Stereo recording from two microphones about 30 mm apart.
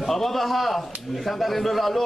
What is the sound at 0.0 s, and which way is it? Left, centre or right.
A man's voice, centre.